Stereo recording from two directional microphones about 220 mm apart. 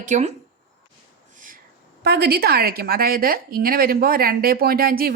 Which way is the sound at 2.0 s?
45° right (ahead or behind).